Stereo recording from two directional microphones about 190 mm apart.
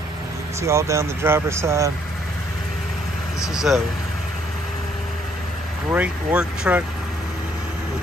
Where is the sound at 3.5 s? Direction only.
Centre (ahead or behind).